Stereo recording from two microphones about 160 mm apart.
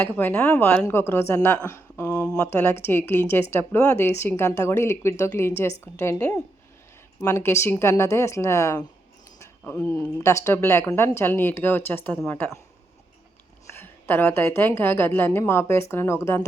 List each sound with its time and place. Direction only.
0.0 s a woman's voice: 10° left (ahead or behind)
2.2 s a woman's voice: 10° left (ahead or behind)
9.4 s a sound: 15° left (ahead or behind)
10.2 s a woman's voice: 15° left (ahead or behind)
13.7 s a woman's voice: 15° left (ahead or behind)